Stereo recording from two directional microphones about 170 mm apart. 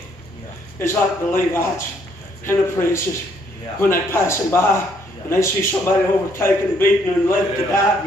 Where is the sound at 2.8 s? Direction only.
20° left (ahead or behind).